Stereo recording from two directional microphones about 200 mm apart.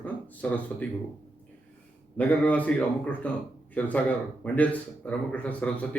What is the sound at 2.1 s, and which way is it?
Speech, 10° left (ahead or behind).